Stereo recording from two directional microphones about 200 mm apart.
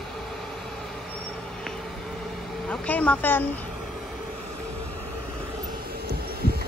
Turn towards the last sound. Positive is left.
turn(degrees=-50)  # may be behind; listen again after turning